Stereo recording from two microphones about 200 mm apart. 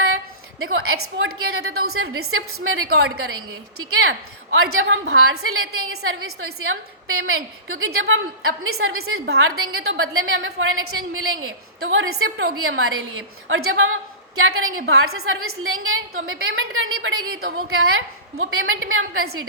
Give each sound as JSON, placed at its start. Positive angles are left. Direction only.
{"t": 0.6, "sound": "a woman's voice", "side_deg": -90}